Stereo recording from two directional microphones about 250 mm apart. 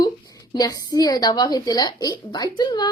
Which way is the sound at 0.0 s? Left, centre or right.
Centre.